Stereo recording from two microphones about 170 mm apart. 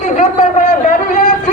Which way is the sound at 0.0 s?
45° left (ahead or behind).